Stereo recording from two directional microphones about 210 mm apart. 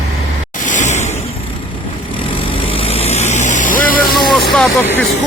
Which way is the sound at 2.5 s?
25° left (ahead or behind).